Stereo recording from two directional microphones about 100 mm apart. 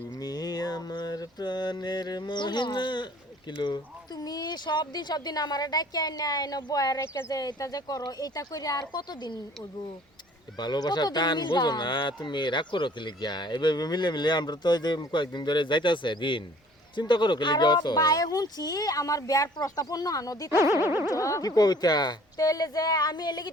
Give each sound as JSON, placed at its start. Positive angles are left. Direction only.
{"t": 0.2, "sound": "mantra", "side_deg": 40}
{"t": 4.2, "sound": "speech", "side_deg": 40}
{"t": 10.6, "sound": "speech", "side_deg": 45}
{"t": 20.5, "sound": "boing", "side_deg": -25}
{"t": 21.1, "sound": "speech", "side_deg": 30}